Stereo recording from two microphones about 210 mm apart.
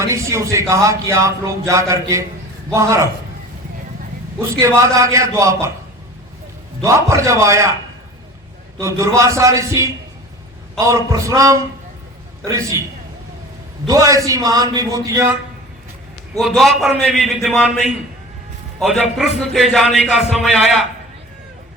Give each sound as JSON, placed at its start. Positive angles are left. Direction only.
{"t": 0.1, "sound": "a man's voice", "side_deg": -15}
{"t": 4.4, "sound": "a man's voice", "side_deg": -15}
{"t": 6.8, "sound": "a man's voice", "side_deg": -15}
{"t": 8.8, "sound": "a man's voice", "side_deg": -15}
{"t": 13.8, "sound": "a man's voice", "side_deg": -15}
{"t": 16.4, "sound": "a man's voice", "side_deg": 0}